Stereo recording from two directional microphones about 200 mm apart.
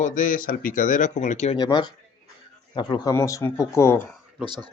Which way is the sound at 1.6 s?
20° left (ahead or behind).